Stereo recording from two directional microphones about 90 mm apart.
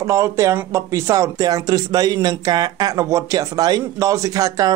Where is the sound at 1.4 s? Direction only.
45° right (ahead or behind).